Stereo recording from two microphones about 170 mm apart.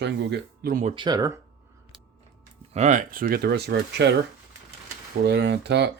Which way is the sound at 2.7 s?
45° right (ahead or behind).